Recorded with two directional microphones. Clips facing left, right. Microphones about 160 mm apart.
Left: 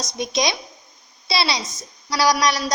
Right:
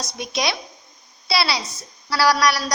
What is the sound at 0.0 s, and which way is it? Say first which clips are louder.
A woman's voice: left 2 dB; 20° left (ahead or behind).